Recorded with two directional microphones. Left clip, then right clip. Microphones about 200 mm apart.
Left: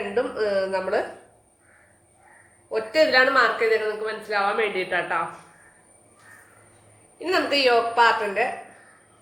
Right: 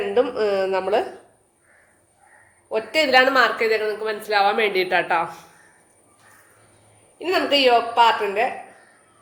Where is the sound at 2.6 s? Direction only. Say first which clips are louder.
Even; 40° right (ahead or behind).